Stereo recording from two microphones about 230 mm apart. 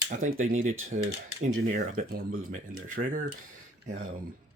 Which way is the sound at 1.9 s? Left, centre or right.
Right.